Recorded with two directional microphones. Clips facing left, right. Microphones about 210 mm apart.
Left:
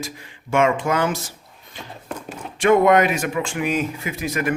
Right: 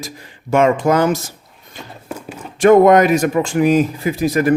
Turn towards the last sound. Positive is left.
turn(degrees=-35)  # may be behind; listen again after turning